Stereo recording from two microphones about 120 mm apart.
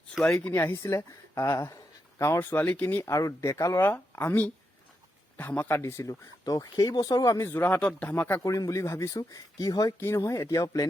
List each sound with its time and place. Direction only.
0.3 s speech: 10° left (ahead or behind)
3.1 s speech: 25° left (ahead or behind)
8.4 s speech: 25° left (ahead or behind)